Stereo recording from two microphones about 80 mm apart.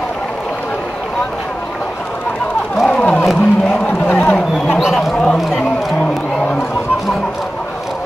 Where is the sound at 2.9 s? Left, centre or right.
Centre.